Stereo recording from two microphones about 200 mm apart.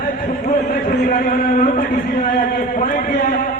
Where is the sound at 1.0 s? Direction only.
45° left (ahead or behind).